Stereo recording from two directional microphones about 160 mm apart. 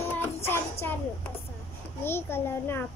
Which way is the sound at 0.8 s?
15° left (ahead or behind).